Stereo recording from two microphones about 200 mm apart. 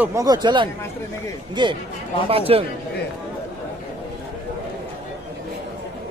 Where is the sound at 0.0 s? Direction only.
15° right (ahead or behind).